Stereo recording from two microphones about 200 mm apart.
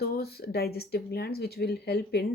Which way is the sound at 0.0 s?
50° left (ahead or behind).